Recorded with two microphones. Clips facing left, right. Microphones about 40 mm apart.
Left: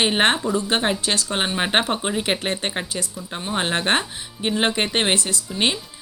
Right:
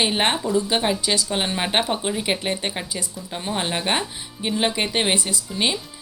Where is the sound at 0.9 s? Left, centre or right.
Left.